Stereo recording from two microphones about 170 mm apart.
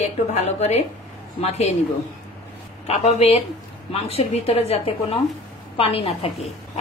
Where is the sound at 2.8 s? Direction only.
40° left (ahead or behind).